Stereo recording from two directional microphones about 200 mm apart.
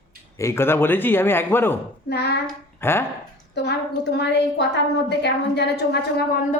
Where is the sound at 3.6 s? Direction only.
55° left (ahead or behind).